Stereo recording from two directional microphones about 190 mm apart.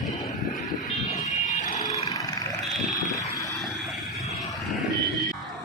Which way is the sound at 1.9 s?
20° left (ahead or behind).